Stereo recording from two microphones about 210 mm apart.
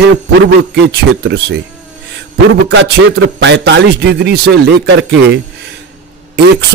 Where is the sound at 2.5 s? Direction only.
55° right (ahead or behind).